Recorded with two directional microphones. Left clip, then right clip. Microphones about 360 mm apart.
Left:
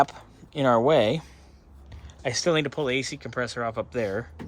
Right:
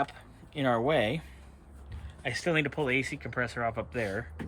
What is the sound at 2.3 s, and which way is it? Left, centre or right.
Speech, left.